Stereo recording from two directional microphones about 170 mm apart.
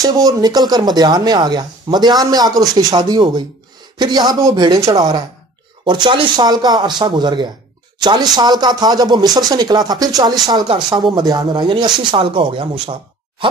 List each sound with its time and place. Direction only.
0.0 s a woman's voice: 20° right (ahead or behind)